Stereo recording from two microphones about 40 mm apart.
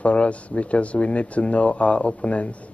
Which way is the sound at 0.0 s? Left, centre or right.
Left.